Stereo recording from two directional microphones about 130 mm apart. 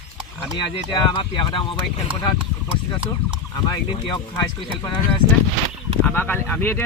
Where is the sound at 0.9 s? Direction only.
40° left (ahead or behind).